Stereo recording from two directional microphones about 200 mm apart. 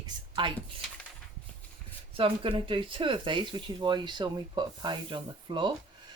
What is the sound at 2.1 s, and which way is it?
Speech, 25° right (ahead or behind).